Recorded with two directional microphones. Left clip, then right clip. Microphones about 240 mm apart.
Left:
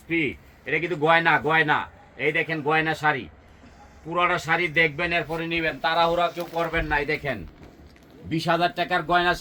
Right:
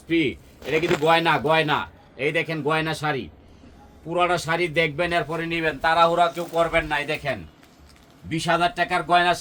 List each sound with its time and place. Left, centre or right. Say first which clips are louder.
0.7 s a man's voice: right 1 dB; centre
4.9 s a man's voice: right 2 dB; right
8.3 s a man's voice: right 1 dB; right